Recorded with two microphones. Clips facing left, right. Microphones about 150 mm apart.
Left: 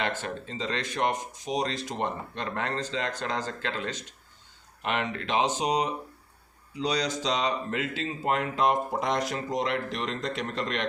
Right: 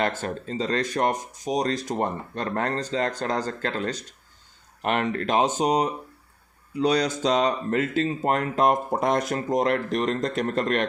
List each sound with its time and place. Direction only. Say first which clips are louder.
0.0 s speech: right 5 dB; 45° right (ahead or behind)